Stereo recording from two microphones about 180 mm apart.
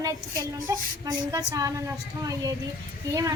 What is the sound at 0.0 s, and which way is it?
Speech, 20° right (ahead or behind).